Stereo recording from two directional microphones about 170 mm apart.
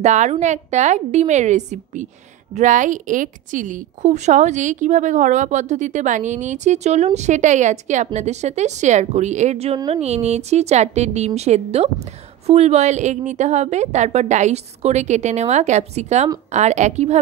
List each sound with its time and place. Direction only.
0.0 s a woman's voice: 45° right (ahead or behind)